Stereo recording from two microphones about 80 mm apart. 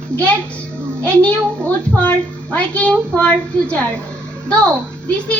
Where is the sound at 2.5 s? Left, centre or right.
Centre.